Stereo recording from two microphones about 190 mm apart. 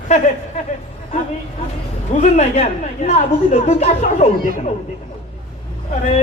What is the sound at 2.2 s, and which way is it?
A man's voice, 35° left (ahead or behind).